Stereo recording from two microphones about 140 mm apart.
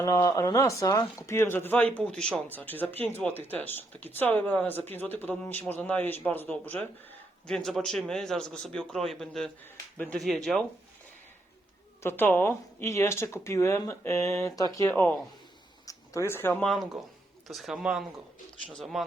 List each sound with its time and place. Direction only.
0.0 s a man's voice: 20° left (ahead or behind); by 10.6 s centre (ahead or behind)
12.0 s speech: 15° left (ahead or behind)
16.6 s a man's voice: centre (ahead or behind)